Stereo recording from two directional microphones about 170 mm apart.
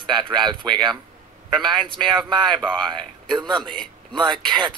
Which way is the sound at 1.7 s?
30° right (ahead or behind).